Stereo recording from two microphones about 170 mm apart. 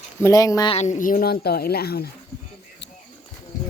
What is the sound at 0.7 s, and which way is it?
Speech, 45° left (ahead or behind).